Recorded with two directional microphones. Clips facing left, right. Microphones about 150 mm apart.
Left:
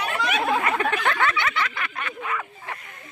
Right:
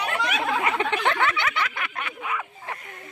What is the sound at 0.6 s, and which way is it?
Snicker, 20° right (ahead or behind).